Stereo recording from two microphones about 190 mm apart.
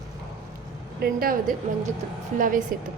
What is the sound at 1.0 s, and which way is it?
A woman's voice, 50° right (ahead or behind).